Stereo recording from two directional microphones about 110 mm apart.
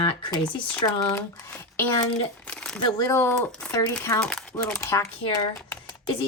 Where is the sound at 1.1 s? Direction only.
25° left (ahead or behind).